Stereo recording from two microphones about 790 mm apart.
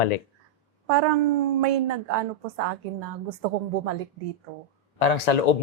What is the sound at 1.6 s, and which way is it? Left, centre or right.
A woman's voice, right.